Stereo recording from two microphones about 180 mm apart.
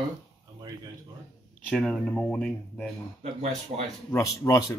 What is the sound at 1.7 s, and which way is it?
Speech, 5° left (ahead or behind).